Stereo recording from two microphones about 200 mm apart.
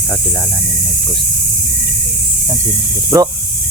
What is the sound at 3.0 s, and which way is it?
Speech, 15° right (ahead or behind).